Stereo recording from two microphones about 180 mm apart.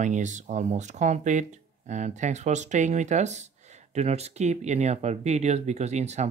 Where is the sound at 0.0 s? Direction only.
40° right (ahead or behind).